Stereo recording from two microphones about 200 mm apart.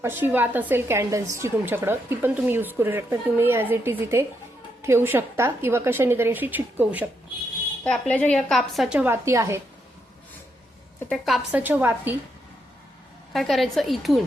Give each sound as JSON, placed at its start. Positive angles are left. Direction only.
{"t": 0.0, "sound": "a woman's voice", "side_deg": -10}
{"t": 7.9, "sound": "a woman's voice", "side_deg": 5}
{"t": 11.0, "sound": "a woman's voice", "side_deg": 5}
{"t": 11.5, "sound": "a woman's voice", "side_deg": -10}
{"t": 13.3, "sound": "a woman's voice", "side_deg": 0}